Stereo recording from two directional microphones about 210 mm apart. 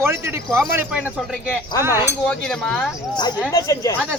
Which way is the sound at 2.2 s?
5° left (ahead or behind).